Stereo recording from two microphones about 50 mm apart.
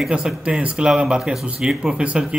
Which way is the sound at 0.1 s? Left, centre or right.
Right.